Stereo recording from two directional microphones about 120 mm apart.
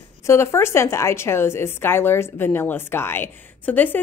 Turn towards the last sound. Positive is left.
turn(degrees=15)  # may be behind; listen again after turning